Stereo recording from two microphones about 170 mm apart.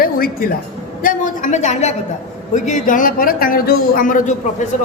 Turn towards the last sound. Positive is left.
turn(degrees=50)  # may be behind; listen again after turning